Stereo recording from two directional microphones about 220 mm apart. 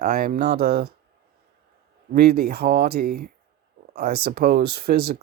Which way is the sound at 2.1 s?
45° right (ahead or behind).